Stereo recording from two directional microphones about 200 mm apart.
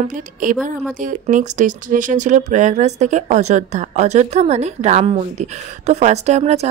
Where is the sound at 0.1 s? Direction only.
40° right (ahead or behind).